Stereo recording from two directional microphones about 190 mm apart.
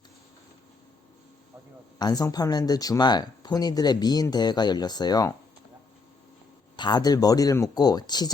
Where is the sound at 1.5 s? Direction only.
5° right (ahead or behind).